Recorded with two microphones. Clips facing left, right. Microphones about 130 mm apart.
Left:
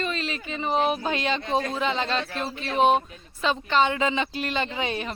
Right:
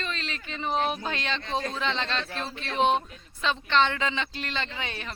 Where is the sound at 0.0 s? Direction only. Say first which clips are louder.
Left 6 dB; 10° left (ahead or behind).